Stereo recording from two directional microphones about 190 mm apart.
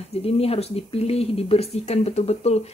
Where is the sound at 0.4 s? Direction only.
30° left (ahead or behind).